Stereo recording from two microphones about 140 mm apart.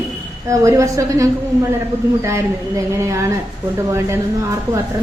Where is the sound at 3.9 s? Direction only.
20° right (ahead or behind).